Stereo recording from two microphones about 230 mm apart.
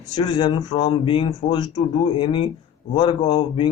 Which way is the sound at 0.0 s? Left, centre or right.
Centre.